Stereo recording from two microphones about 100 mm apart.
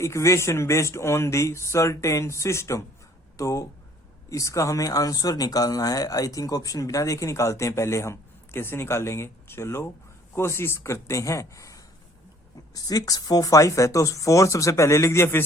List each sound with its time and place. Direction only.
0.0 s speech: 30° left (ahead or behind)